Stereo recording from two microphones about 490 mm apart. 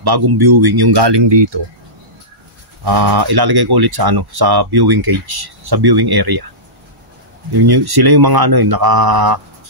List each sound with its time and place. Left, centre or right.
0.0 s speech: right
2.8 s speech: right
7.5 s speech: right